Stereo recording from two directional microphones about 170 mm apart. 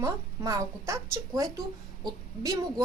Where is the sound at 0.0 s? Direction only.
20° right (ahead or behind).